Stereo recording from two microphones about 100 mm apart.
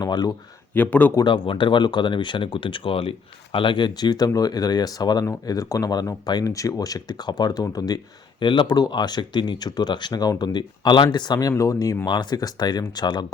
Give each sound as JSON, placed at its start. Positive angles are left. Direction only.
{"t": 0.0, "sound": "speech", "side_deg": 40}
{"t": 0.7, "sound": "speech", "side_deg": 15}
{"t": 1.2, "sound": "speech", "side_deg": 55}
{"t": 8.4, "sound": "speech", "side_deg": 55}
{"t": 12.0, "sound": "speech", "side_deg": 45}